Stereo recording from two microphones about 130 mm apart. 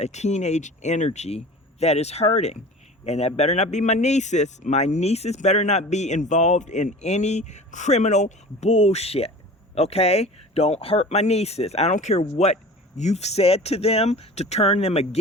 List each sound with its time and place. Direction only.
0.0 s speech: 60° left (ahead or behind)
8.7 s speech: 50° left (ahead or behind)